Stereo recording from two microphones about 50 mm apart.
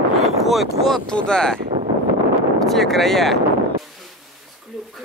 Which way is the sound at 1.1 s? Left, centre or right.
Centre.